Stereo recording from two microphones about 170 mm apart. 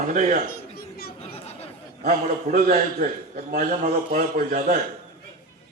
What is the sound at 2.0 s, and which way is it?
Speech, 55° right (ahead or behind).